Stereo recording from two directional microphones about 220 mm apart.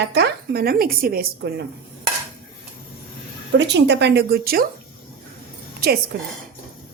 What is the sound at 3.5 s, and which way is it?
Speech, 50° right (ahead or behind).